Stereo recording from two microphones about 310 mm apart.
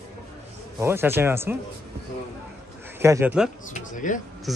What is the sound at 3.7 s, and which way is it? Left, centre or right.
Speech, left.